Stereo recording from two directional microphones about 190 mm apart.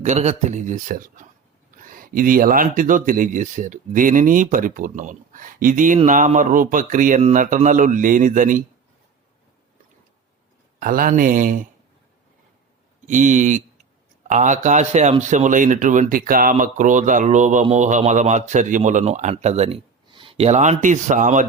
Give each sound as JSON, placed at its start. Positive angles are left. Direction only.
{"t": 0.0, "sound": "speech", "side_deg": -35}
{"t": 10.8, "sound": "speech", "side_deg": -45}
{"t": 13.1, "sound": "speech", "side_deg": -40}